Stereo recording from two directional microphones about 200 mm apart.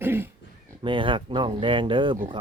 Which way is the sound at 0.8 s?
25° right (ahead or behind).